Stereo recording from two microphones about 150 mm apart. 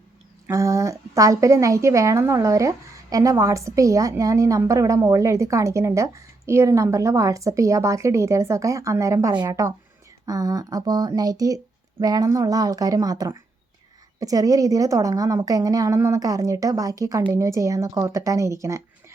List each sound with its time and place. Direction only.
0.4 s a woman's voice: 20° right (ahead or behind)